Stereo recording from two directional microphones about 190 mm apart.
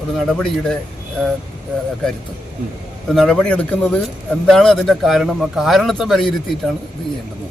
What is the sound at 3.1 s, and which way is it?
A man's voice, centre (ahead or behind).